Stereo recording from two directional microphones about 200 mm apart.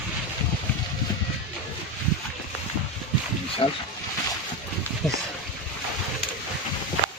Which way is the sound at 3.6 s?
25° left (ahead or behind).